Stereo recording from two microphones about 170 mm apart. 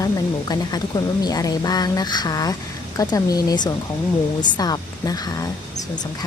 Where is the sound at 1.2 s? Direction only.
20° left (ahead or behind).